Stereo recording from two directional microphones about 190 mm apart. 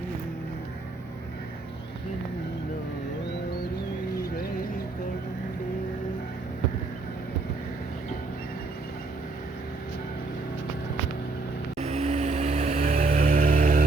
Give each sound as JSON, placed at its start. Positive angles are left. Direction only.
{"t": 11.8, "sound": "vehicle", "side_deg": -35}